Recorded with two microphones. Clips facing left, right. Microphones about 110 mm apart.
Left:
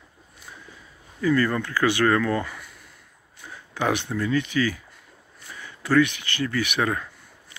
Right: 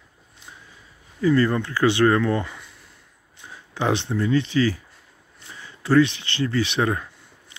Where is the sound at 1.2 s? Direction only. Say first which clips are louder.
Right 3 dB; 25° right (ahead or behind).